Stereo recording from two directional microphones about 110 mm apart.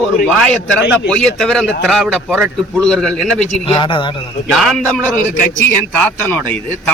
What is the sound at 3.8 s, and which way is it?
Speech, 45° left (ahead or behind).